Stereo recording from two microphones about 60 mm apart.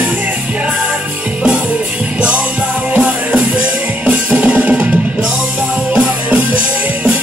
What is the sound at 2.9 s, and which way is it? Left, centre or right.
Music, centre.